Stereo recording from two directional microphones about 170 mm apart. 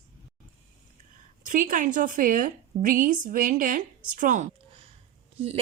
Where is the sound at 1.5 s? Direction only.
50° right (ahead or behind).